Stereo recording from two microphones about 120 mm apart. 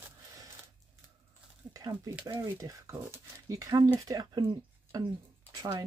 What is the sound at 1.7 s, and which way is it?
Speech, 30° right (ahead or behind).